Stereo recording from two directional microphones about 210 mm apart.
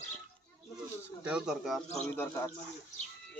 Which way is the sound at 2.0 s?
10° left (ahead or behind).